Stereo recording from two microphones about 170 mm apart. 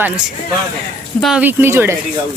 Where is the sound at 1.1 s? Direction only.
Centre (ahead or behind).